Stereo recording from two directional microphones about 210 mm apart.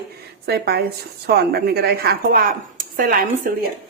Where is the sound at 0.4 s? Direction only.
50° right (ahead or behind).